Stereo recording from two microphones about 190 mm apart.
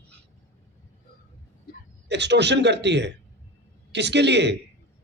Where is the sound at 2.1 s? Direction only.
65° right (ahead or behind).